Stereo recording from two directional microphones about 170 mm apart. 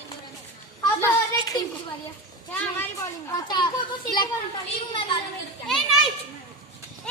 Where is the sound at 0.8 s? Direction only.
20° left (ahead or behind).